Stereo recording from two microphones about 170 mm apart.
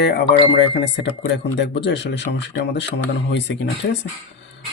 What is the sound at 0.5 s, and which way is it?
Speech, 90° left.